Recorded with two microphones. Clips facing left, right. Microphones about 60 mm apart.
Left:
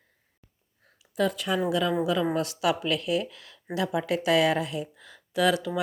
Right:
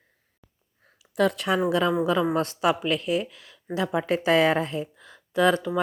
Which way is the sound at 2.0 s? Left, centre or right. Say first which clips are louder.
Right 3 dB; right.